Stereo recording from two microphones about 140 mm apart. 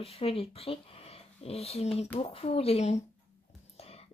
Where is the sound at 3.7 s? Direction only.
45° left (ahead or behind).